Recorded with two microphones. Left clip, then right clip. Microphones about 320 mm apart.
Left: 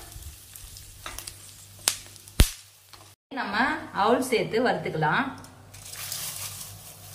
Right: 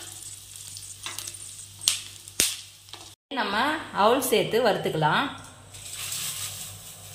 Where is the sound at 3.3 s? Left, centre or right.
Right.